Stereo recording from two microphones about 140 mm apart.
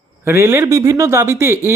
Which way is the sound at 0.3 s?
20° right (ahead or behind).